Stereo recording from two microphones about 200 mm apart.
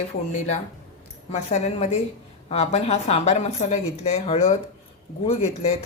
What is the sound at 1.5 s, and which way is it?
Speech, 30° left (ahead or behind).